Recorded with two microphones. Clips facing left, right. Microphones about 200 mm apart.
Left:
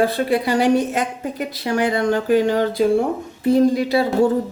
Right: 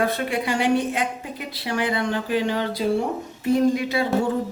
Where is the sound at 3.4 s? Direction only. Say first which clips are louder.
Left 4 dB; 35° left (ahead or behind).